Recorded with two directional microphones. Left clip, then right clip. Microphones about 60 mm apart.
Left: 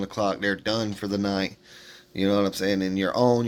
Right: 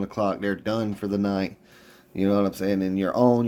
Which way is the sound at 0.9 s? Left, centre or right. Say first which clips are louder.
Even; centre.